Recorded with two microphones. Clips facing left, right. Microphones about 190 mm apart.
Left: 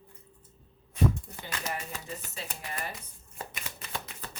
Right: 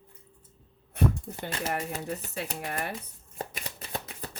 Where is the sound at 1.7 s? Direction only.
60° right (ahead or behind).